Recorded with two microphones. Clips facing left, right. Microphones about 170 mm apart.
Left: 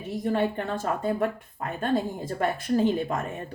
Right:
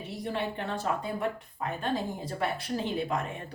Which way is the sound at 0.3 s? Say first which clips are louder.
Left 7 dB; 45° left (ahead or behind).